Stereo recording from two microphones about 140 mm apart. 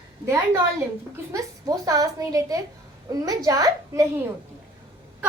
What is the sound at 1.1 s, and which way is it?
A woman's voice, 25° right (ahead or behind).